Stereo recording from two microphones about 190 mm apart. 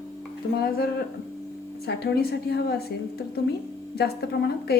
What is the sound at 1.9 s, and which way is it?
A woman's voice, 60° left (ahead or behind).